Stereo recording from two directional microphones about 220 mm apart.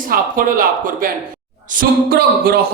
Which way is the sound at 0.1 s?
40° right (ahead or behind).